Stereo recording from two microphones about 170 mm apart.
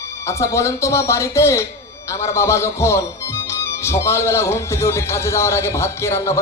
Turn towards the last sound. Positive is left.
turn(degrees=15)  # may be behind; listen again after turning